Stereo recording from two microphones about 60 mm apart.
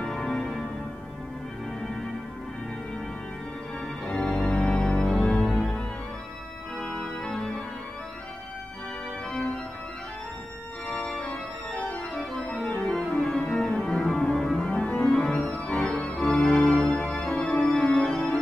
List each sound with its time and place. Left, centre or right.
0.0 s music: centre
4.0 s organ: centre
10.9 s organ: centre
12.8 s music: centre
15.6 s organ: centre